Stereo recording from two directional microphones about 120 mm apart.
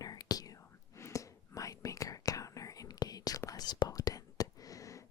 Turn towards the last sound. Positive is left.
turn(degrees=25)  # may be behind; listen again after turning